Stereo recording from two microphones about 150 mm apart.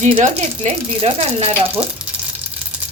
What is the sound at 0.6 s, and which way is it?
Speech, 40° right (ahead or behind).